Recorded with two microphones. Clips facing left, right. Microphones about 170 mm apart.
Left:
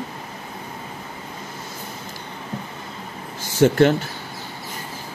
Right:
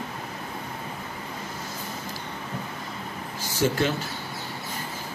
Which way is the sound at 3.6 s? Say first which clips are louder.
Left 8 dB; 60° left (ahead or behind).